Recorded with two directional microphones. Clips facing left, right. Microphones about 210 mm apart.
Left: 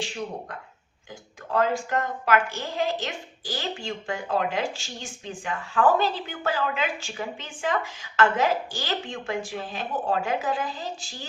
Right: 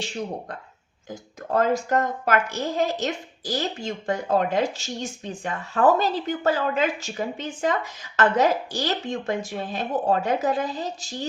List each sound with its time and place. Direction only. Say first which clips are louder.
1.5 s a woman's voice: right 3 dB; 40° right (ahead or behind)